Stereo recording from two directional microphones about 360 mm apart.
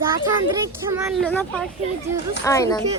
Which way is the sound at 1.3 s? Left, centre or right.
Centre.